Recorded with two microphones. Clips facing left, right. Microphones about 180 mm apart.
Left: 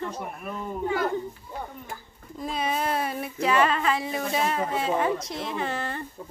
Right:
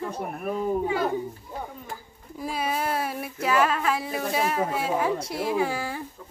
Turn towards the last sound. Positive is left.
turn(degrees=-5)  # may be behind; listen again after turning